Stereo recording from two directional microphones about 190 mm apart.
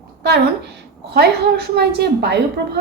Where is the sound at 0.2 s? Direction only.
60° right (ahead or behind).